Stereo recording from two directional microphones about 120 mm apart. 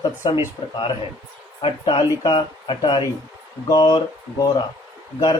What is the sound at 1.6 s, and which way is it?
Speech, 50° left (ahead or behind).